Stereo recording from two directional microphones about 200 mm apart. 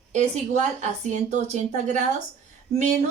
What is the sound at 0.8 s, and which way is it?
A woman's voice, 35° right (ahead or behind).